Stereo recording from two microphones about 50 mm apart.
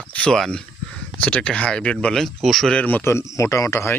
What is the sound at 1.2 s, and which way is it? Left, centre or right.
Speech, left.